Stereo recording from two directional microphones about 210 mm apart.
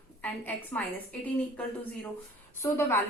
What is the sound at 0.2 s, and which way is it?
Speech, 5° left (ahead or behind).